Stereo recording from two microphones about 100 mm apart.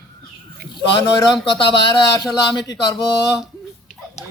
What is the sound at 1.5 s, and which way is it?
Speech, 55° left (ahead or behind).